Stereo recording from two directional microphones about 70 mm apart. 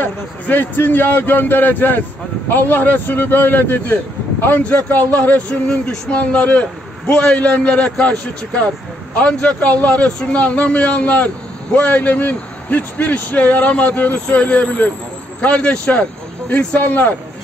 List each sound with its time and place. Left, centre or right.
0.0 s a man's voice: left